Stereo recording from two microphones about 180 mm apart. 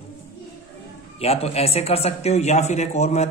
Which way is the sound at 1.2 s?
35° left (ahead or behind).